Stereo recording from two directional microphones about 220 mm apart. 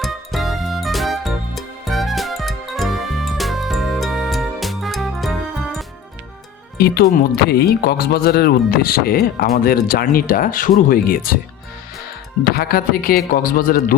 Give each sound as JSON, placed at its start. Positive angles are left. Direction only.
{"t": 0.0, "sound": "music", "side_deg": 0}
{"t": 6.7, "sound": "speech", "side_deg": 45}
{"t": 12.5, "sound": "a man's voice", "side_deg": 40}